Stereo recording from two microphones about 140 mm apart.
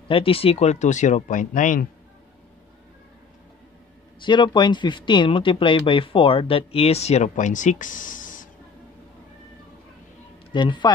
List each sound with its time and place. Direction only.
0.1 s speech: 40° left (ahead or behind); by 1.9 s 65° left (ahead or behind)
4.2 s speech: 35° left (ahead or behind); by 8.5 s 70° left (ahead or behind)
10.5 s speech: 35° left (ahead or behind)